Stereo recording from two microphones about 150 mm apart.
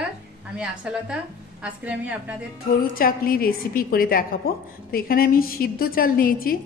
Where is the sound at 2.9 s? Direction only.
75° left (ahead or behind).